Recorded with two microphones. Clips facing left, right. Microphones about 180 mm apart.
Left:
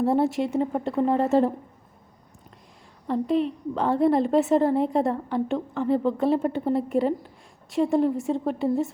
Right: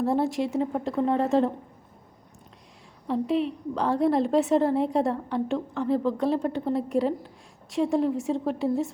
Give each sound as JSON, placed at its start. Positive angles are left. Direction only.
{"t": 0.0, "sound": "a woman's voice", "side_deg": 0}
{"t": 3.1, "sound": "a woman's voice", "side_deg": 0}